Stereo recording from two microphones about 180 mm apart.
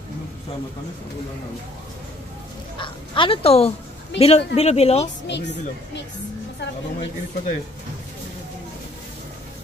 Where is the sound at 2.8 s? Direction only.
25° left (ahead or behind).